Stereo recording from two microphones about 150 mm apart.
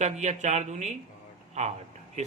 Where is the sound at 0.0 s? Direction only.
50° right (ahead or behind).